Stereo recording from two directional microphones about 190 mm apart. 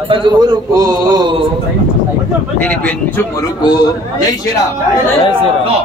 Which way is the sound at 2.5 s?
5° left (ahead or behind).